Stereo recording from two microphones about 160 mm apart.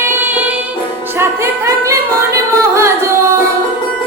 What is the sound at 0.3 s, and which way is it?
Music, 10° right (ahead or behind).